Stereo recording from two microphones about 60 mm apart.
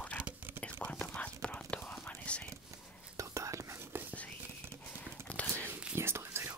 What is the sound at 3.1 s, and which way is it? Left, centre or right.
Whispering, right.